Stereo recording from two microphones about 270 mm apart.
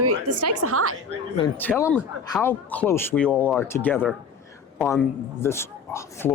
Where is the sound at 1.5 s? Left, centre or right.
Centre.